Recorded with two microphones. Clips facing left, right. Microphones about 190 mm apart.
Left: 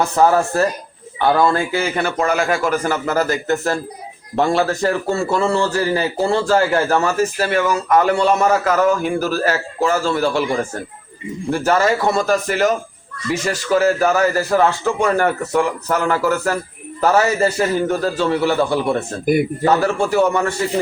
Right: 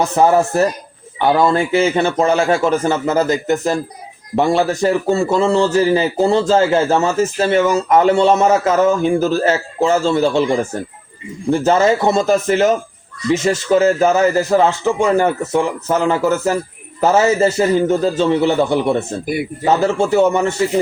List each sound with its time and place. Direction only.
0.0 s a man's voice: 20° right (ahead or behind)